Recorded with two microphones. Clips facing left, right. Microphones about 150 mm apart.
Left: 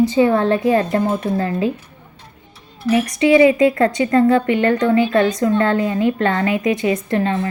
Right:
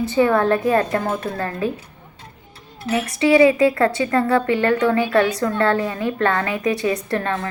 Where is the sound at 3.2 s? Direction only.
25° left (ahead or behind).